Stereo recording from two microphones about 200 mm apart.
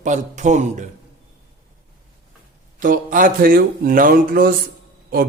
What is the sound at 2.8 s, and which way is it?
Speech, 40° right (ahead or behind).